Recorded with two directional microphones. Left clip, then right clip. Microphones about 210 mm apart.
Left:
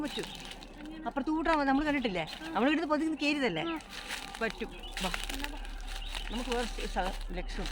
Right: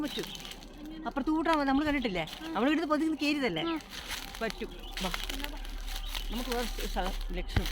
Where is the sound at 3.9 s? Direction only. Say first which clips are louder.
Even; 10° right (ahead or behind).